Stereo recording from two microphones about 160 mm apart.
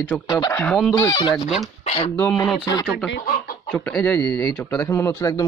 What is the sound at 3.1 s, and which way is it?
Chicken, 65° left (ahead or behind).